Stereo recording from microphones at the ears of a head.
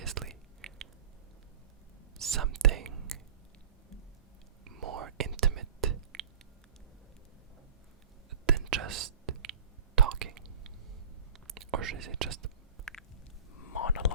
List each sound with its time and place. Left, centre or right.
0.0 s whispering: right
2.1 s whispering: right
4.6 s whispering: right
8.4 s whispering: right
13.7 s whispering: left